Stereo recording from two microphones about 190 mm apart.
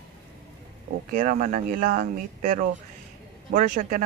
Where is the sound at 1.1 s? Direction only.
45° right (ahead or behind).